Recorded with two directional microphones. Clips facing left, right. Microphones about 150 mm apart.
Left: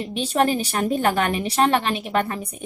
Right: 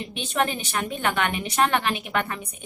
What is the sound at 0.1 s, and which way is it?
A woman's voice, 35° left (ahead or behind).